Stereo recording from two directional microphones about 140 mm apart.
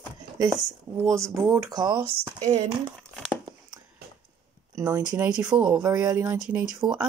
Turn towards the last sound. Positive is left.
turn(degrees=-25)  # may be behind; listen again after turning